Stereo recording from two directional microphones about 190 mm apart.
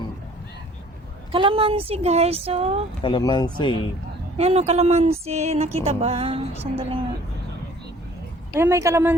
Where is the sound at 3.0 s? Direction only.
25° left (ahead or behind).